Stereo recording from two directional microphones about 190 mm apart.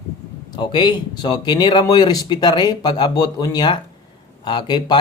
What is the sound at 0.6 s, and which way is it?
Speech, 25° left (ahead or behind).